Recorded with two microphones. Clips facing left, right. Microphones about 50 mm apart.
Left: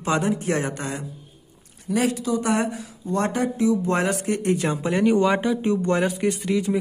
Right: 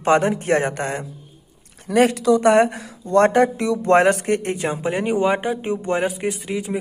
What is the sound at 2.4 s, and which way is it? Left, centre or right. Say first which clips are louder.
Speech: right 8 dB; right.